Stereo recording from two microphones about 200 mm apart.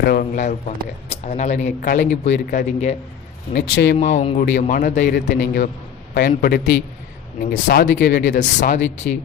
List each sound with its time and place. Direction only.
0.0 s a man's voice: 45° left (ahead or behind)
2.0 s speech: 60° left (ahead or behind)
2.5 s speech: 40° left (ahead or behind)
3.5 s speech: 55° left (ahead or behind)
3.9 s a man's voice: 35° left (ahead or behind); by 8.4 s 60° left (ahead or behind)
8.4 s a man's voice: 40° left (ahead or behind)